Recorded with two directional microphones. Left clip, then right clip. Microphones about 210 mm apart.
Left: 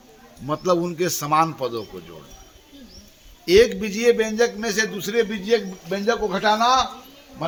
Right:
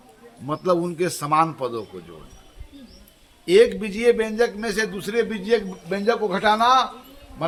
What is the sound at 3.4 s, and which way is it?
A man's voice, 15° left (ahead or behind).